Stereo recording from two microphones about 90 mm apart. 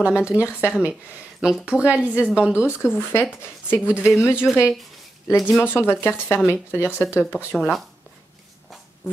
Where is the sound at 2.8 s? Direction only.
25° left (ahead or behind).